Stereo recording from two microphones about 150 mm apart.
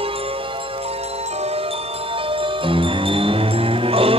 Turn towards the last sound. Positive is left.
turn(degrees=-40)  # may be behind; listen again after turning